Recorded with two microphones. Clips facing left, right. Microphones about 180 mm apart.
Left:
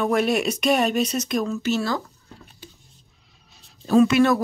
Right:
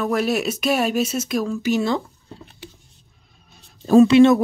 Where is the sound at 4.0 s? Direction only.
25° right (ahead or behind).